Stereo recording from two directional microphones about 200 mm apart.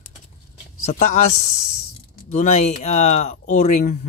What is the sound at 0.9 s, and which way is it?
Speech, 35° left (ahead or behind).